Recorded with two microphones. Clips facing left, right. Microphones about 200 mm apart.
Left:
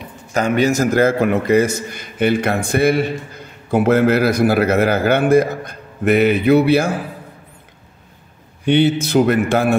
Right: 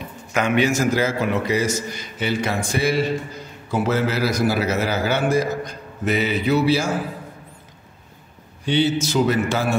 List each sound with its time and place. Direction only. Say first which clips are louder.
0.3 s a man's voice: left 3 dB; 40° left (ahead or behind)
1.0 s a man's voice: left 6 dB; 55° left (ahead or behind)
8.6 s a man's voice: left 5 dB; 60° left (ahead or behind)